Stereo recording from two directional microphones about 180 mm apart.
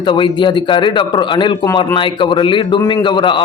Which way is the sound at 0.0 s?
25° left (ahead or behind).